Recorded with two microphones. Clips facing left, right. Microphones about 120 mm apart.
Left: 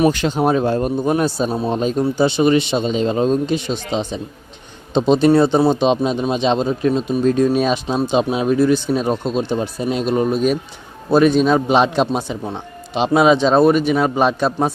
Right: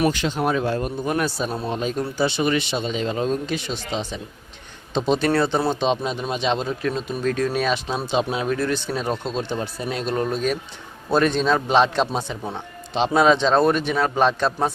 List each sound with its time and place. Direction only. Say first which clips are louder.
0.1 s speech: left 5 dB; 45° left (ahead or behind); by 1.7 s 15° left (ahead or behind)
1.7 s a man's voice: left 7 dB; 30° left (ahead or behind); by 14.7 s 10° left (ahead or behind)